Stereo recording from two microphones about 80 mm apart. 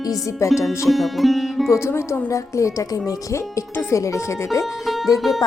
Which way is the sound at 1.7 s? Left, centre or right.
Left.